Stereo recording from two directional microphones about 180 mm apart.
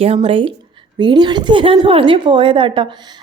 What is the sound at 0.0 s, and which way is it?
A woman's voice, 35° right (ahead or behind).